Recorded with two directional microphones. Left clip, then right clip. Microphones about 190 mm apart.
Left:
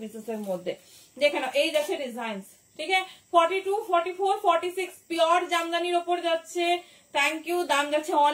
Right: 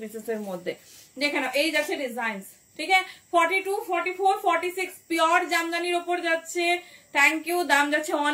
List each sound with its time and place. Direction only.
0.7 s a woman's voice: 20° right (ahead or behind)